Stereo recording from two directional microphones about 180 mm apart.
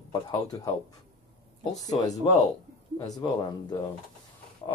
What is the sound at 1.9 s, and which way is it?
Speech, 20° left (ahead or behind).